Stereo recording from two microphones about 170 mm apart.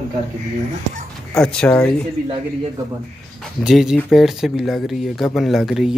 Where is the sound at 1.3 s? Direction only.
5° left (ahead or behind).